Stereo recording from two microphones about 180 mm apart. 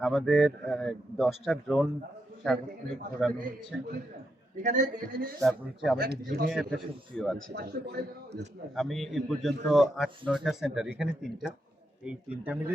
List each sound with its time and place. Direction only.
0.0 s a man's voice: centre (ahead or behind)
3.2 s a man's voice: centre (ahead or behind)
4.6 s a man's voice: 45° right (ahead or behind)
5.4 s a man's voice: centre (ahead or behind)
6.0 s speech: 55° right (ahead or behind)
6.5 s a man's voice: centre (ahead or behind)
7.5 s speech: 60° right (ahead or behind)
8.7 s a man's voice: centre (ahead or behind)